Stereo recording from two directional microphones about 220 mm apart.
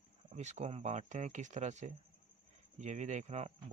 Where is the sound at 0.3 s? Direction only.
30° right (ahead or behind).